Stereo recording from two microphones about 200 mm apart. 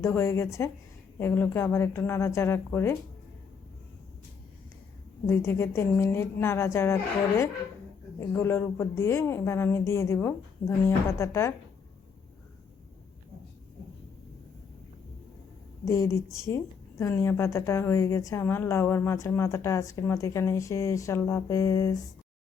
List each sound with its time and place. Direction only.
0.0 s a woman's voice: 10° left (ahead or behind)
5.2 s a woman's voice: 10° left (ahead or behind)
15.8 s a woman's voice: 15° left (ahead or behind)